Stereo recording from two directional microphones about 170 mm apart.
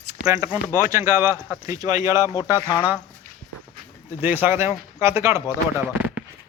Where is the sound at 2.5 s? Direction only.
25° left (ahead or behind).